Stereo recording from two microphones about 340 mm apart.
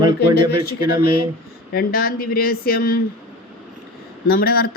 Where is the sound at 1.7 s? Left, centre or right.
Left.